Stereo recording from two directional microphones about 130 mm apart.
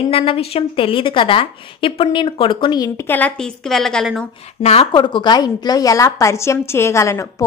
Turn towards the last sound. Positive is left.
turn(degrees=25)  # may be behind; listen again after turning